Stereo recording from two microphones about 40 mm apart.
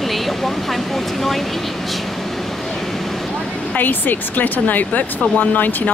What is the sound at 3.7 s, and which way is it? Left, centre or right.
Speech, left.